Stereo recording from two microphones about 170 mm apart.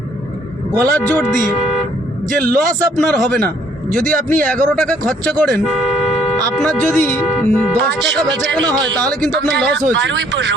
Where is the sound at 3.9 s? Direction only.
50° right (ahead or behind).